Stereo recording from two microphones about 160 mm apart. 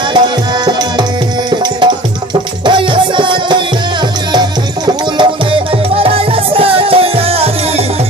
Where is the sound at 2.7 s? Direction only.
30° right (ahead or behind).